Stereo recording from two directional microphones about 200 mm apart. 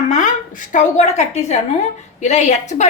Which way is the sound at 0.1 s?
40° left (ahead or behind).